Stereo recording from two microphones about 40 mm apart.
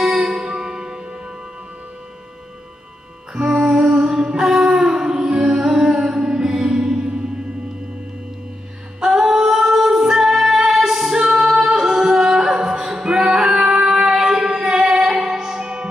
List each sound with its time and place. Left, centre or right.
0.0 s music: centre
3.4 s music: centre
9.0 s female singing: centre
13.2 s singing: centre